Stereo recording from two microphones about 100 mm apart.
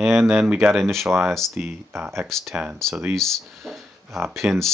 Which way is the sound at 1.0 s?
25° right (ahead or behind).